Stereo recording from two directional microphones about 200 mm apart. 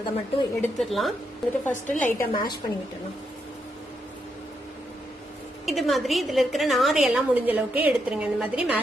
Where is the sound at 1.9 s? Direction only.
40° left (ahead or behind).